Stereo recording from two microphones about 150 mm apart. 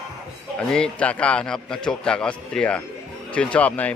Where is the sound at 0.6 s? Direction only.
5° left (ahead or behind).